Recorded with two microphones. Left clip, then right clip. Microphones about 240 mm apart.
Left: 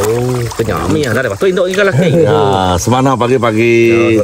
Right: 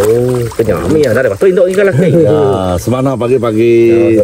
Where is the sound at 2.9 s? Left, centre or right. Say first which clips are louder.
Even; left.